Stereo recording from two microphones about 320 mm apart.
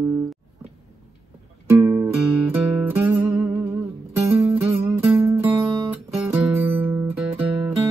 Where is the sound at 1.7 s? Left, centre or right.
Centre.